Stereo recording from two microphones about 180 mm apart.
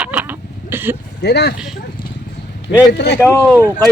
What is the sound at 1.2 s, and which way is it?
Speech, 65° left (ahead or behind).